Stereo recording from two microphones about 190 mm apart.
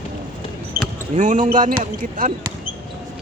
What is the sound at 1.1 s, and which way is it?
Speech, 40° right (ahead or behind).